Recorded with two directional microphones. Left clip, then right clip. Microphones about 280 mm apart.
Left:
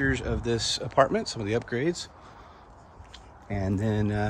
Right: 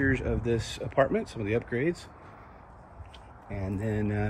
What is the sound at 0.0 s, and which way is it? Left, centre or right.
Speech, centre.